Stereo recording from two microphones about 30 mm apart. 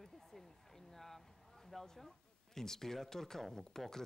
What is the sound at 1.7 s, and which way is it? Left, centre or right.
Speech, centre.